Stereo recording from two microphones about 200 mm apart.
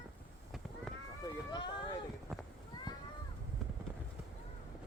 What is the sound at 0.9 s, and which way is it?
Run, centre (ahead or behind).